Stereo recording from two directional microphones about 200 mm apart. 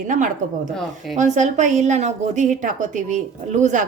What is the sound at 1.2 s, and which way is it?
A woman's voice, 35° right (ahead or behind).